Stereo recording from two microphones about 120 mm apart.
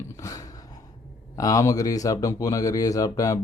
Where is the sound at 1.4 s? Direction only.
30° left (ahead or behind).